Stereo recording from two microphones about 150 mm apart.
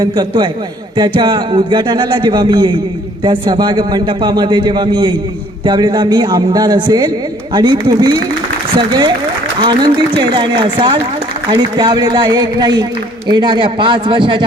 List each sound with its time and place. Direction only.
0.0 s a man's voice: 30° right (ahead or behind)
9.6 s a man's voice: 30° right (ahead or behind)